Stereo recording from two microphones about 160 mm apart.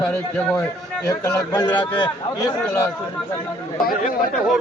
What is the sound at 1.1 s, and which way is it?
A man's voice, 20° left (ahead or behind).